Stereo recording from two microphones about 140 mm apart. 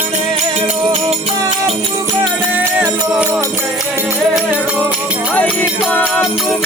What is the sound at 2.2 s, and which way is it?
Music, 15° right (ahead or behind).